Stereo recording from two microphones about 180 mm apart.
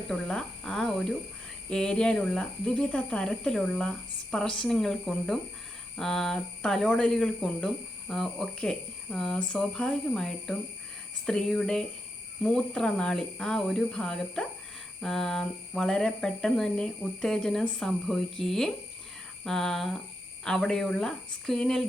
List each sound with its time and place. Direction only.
0.1 s speech: 5° left (ahead or behind)